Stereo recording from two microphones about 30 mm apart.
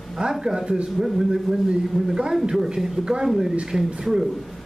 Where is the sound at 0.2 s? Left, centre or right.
Right.